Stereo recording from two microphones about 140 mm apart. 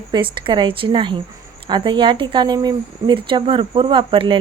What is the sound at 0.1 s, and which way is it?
A woman's voice, 35° right (ahead or behind).